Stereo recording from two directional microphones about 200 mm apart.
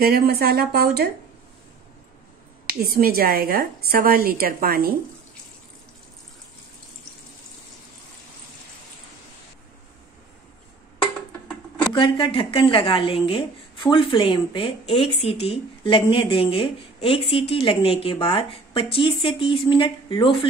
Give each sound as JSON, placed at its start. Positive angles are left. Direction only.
{"t": 0.0, "sound": "a woman's voice", "side_deg": -50}
{"t": 2.6, "sound": "a woman's voice", "side_deg": -50}
{"t": 11.9, "sound": "a woman's voice", "side_deg": 25}